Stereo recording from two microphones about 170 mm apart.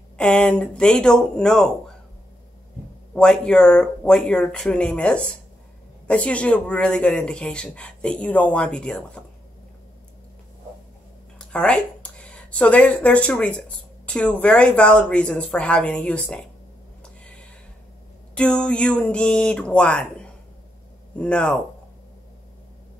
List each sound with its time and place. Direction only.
0.2 s speech: 5° left (ahead or behind)
3.2 s speech: 5° left (ahead or behind)
11.3 s speech: 5° left (ahead or behind)
17.0 s a sound: 5° left (ahead or behind)
18.3 s speech: 5° left (ahead or behind)